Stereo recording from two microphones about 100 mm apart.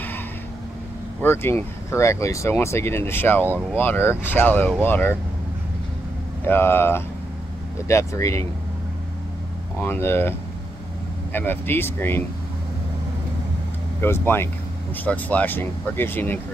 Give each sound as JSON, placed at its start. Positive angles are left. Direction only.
{"t": 1.2, "sound": "speech", "side_deg": 20}
{"t": 6.4, "sound": "speech", "side_deg": 25}
{"t": 9.8, "sound": "speech", "side_deg": 25}
{"t": 11.3, "sound": "speech", "side_deg": 20}
{"t": 14.0, "sound": "speech", "side_deg": 25}